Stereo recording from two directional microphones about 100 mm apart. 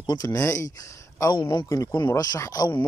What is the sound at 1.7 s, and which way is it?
Speech, 35° left (ahead or behind).